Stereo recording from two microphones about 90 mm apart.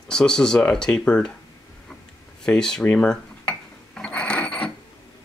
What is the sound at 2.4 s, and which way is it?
Speech, 10° left (ahead or behind).